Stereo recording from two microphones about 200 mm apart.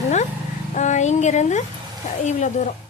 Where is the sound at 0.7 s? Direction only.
35° left (ahead or behind).